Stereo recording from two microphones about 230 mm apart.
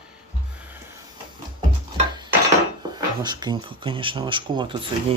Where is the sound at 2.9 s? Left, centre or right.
Centre.